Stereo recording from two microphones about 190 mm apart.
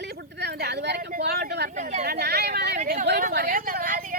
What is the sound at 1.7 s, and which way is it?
Speech, 40° right (ahead or behind).